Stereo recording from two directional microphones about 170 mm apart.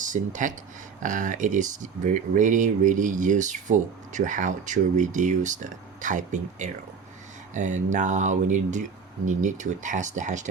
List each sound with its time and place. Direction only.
0.0 s speech: 50° right (ahead or behind)